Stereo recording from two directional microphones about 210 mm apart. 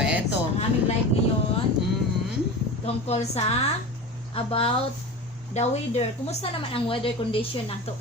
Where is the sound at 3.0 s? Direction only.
30° left (ahead or behind).